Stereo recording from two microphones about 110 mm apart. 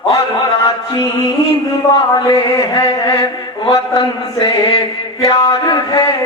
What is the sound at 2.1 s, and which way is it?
A man's voice, 45° left (ahead or behind).